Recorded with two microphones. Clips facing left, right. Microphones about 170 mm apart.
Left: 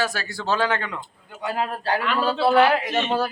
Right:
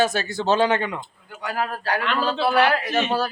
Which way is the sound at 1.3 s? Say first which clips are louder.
Left 1 dB; 25° left (ahead or behind).